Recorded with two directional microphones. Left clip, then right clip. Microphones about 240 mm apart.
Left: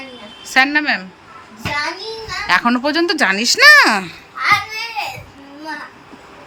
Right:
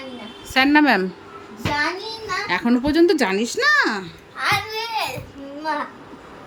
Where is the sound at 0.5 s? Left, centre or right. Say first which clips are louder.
Left 1 dB; centre.